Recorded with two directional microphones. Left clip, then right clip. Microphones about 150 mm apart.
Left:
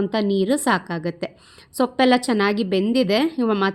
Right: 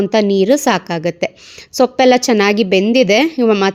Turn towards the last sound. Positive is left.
turn(degrees=-25)  # may be behind; listen again after turning